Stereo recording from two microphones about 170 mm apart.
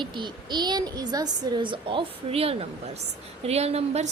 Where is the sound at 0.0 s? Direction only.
25° right (ahead or behind).